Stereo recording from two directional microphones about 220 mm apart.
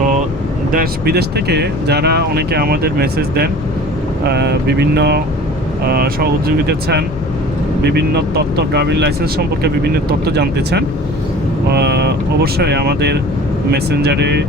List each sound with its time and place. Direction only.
0.7 s speech: 45° right (ahead or behind)
7.8 s speech: 45° right (ahead or behind)
10.2 s speech: 45° right (ahead or behind)